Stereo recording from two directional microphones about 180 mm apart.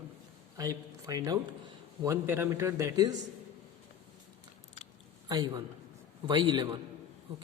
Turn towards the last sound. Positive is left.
turn(degrees=-25)  # may be behind; listen again after turning